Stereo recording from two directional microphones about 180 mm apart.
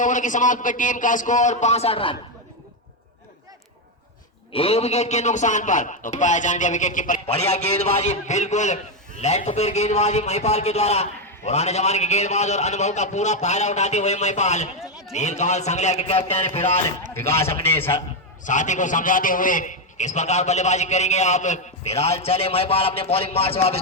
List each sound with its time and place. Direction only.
0.0 s a man's voice: 45° left (ahead or behind)
4.5 s a man's voice: 35° left (ahead or behind)
14.8 s a sound: centre (ahead or behind)
15.1 s a man's voice: 40° left (ahead or behind)
17.2 s a man's voice: 15° left (ahead or behind)
18.4 s a man's voice: 45° left (ahead or behind)